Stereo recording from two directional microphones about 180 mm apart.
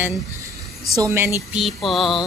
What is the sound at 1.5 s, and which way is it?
Mantra, centre (ahead or behind).